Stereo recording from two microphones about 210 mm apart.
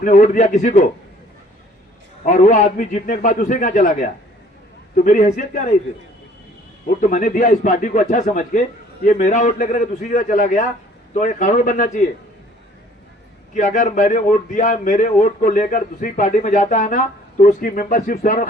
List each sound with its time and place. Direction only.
0.0 s a man's voice: 40° left (ahead or behind)
2.2 s a man's voice: 35° left (ahead or behind)
7.0 s a man's voice: 40° left (ahead or behind)
13.5 s a man's voice: 35° left (ahead or behind)